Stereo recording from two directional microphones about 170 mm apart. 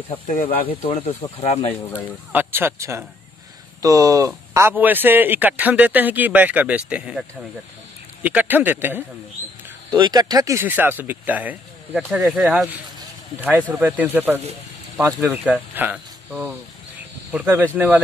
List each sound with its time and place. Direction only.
0.7 s speech: 35° left (ahead or behind)
1.7 s speech: 10° left (ahead or behind)
2.3 s a man's voice: 15° right (ahead or behind)
9.9 s a man's voice: 25° right (ahead or behind)